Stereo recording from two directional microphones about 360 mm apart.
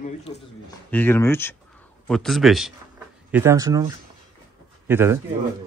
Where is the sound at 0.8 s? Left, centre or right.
Centre.